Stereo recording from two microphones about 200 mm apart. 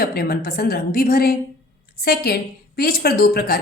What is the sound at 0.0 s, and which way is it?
A woman's voice, 50° left (ahead or behind).